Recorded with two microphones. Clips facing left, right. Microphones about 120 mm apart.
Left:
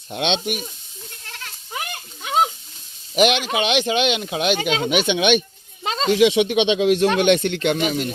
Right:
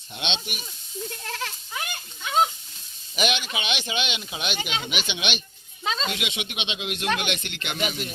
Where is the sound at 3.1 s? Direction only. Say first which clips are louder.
Left 9 dB; 75° left (ahead or behind).